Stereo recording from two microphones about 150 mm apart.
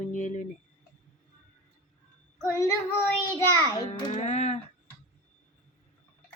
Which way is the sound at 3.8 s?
50° left (ahead or behind).